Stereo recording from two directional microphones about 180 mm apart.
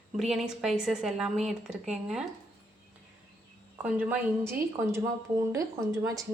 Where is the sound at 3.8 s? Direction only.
10° right (ahead or behind).